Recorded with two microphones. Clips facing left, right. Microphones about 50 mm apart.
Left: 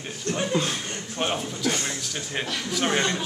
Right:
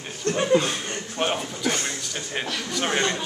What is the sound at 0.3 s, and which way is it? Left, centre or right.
Chuckle, centre.